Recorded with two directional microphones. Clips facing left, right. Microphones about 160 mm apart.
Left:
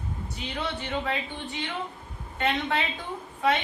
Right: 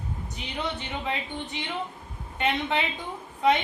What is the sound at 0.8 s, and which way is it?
A woman's voice, 15° right (ahead or behind).